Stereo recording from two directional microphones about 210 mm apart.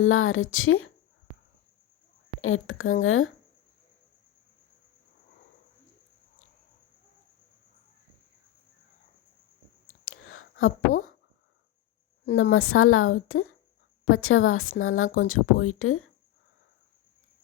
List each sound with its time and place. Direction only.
0.0 s speech: 75° left (ahead or behind)
2.4 s speech: 75° left (ahead or behind)
9.8 s whispering: 70° left (ahead or behind)
12.2 s speech: 65° left (ahead or behind); by 16.0 s 85° left